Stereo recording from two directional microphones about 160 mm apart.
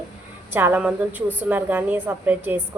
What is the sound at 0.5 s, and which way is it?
A woman's voice, 10° right (ahead or behind).